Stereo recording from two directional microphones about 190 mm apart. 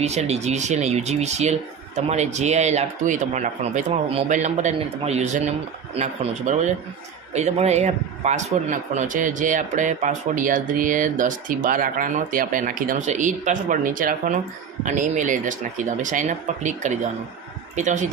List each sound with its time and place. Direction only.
0.0 s a man's voice: 35° right (ahead or behind)